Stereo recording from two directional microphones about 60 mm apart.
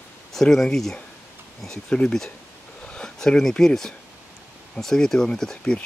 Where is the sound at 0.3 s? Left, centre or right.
Centre.